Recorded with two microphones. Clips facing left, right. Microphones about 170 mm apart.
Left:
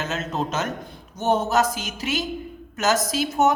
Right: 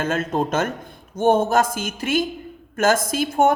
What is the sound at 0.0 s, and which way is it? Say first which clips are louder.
Speech: right 5 dB; 50° right (ahead or behind).